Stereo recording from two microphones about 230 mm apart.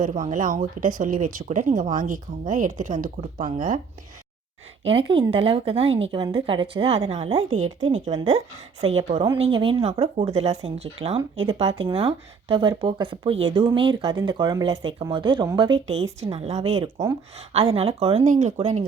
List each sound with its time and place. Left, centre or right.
0.0 s speech: right
4.9 s speech: right
7.5 s speech: right
8.1 s a woman's voice: centre